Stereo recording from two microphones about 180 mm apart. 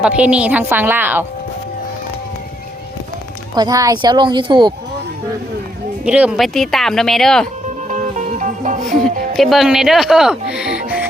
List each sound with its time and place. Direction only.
0.0 s a woman's voice: 5° right (ahead or behind)
3.5 s speech: 20° right (ahead or behind)
6.1 s speech: 5° right (ahead or behind)
7.9 s music: 45° right (ahead or behind)
9.0 s speech: centre (ahead or behind)